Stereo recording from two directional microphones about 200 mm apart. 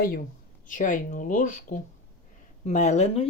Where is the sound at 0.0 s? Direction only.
45° left (ahead or behind).